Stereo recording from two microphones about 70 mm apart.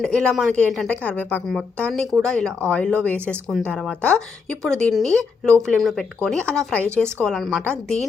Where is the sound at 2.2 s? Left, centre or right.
Centre.